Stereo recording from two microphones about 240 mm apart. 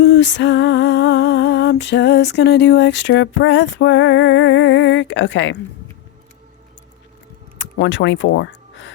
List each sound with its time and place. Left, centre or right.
0.1 s music: left
7.6 s speech: left